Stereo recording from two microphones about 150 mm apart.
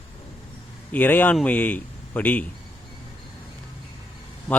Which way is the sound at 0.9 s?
10° left (ahead or behind).